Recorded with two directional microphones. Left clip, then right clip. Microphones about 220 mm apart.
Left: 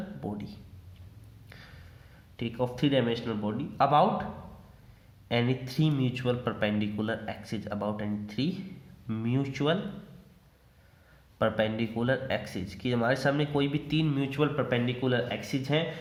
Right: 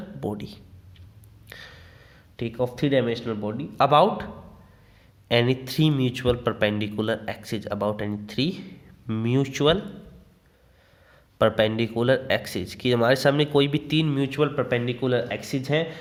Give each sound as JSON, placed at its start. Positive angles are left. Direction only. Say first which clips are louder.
{"t": 0.2, "sound": "speech", "louder": "right 11 dB", "side_deg": -40}
{"t": 1.5, "sound": "a sound", "louder": "right 9 dB", "side_deg": -35}
{"t": 2.3, "sound": "a man's voice", "louder": "right 5 dB", "side_deg": -30}
{"t": 5.3, "sound": "speech", "louder": "right 8 dB", "side_deg": -40}
{"t": 11.3, "sound": "speech", "louder": "right 7 dB", "side_deg": -40}